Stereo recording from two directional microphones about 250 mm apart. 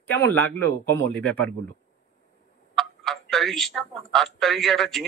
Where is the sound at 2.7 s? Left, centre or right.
Centre.